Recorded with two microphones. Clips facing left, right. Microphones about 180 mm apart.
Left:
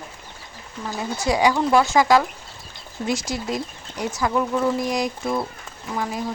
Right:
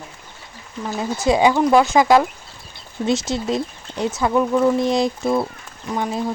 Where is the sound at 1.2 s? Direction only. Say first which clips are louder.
Right 4 dB; 25° right (ahead or behind).